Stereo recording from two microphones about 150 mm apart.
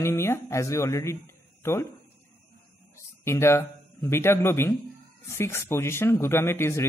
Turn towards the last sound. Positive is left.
turn(degrees=15)  # may be behind; listen again after turning